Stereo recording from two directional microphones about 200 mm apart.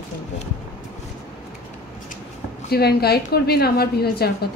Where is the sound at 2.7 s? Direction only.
50° left (ahead or behind).